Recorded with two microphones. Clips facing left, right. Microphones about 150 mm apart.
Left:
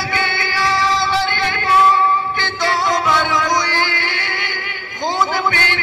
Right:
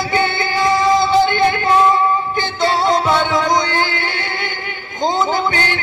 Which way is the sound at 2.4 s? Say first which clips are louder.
Right 3 dB; 25° right (ahead or behind).